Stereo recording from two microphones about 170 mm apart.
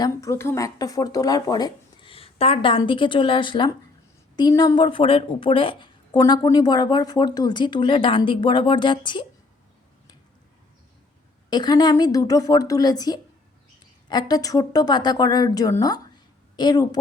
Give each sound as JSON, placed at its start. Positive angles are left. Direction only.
{"t": 0.0, "sound": "a woman's voice", "side_deg": 20}
{"t": 11.5, "sound": "a woman's voice", "side_deg": 25}